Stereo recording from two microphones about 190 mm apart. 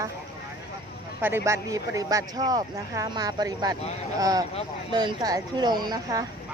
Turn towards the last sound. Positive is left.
turn(degrees=-20)  # may be behind; listen again after turning